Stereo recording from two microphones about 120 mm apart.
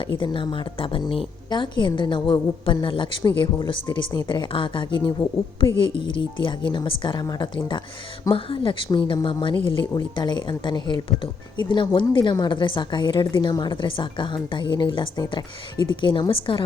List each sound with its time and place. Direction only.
0.1 s a woman's voice: 45° left (ahead or behind)